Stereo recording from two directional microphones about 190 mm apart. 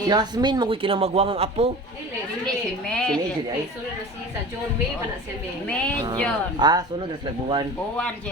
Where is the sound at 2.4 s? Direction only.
5° left (ahead or behind).